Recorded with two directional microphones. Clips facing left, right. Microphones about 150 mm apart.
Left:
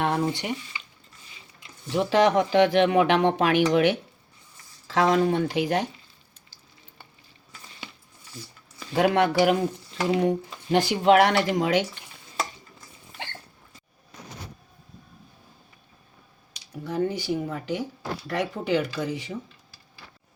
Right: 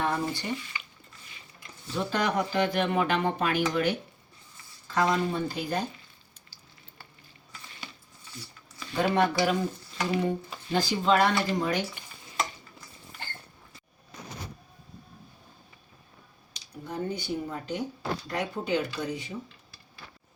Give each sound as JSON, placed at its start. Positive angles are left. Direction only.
{"t": 0.0, "sound": "speech", "side_deg": 75}
{"t": 1.9, "sound": "speech", "side_deg": 90}
{"t": 4.9, "sound": "speech", "side_deg": 90}
{"t": 9.0, "sound": "speech", "side_deg": 80}
{"t": 13.2, "sound": "rodents", "side_deg": 80}
{"t": 16.8, "sound": "speech", "side_deg": 90}